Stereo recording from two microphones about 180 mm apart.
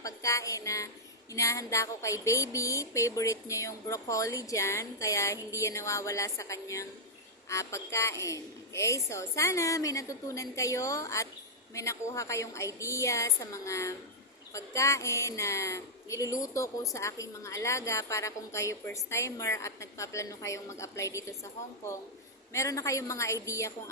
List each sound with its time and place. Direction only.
0.0 s a woman's voice: 15° left (ahead or behind)
22.5 s a woman's voice: 15° left (ahead or behind)